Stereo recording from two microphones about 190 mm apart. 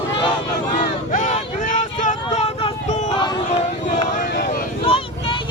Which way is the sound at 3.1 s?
25° left (ahead or behind).